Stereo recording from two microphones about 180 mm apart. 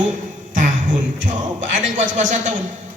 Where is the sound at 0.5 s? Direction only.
45° right (ahead or behind).